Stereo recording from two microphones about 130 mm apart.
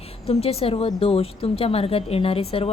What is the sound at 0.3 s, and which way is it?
A woman's voice, 50° left (ahead or behind).